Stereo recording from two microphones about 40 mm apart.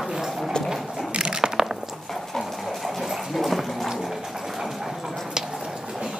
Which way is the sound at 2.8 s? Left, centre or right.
Centre.